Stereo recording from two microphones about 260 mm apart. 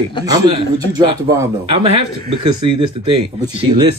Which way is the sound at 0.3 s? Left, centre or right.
Centre.